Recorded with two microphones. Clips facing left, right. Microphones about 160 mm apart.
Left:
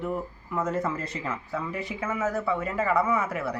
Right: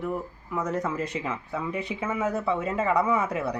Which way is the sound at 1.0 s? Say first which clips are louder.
Right 3 dB; 15° right (ahead or behind).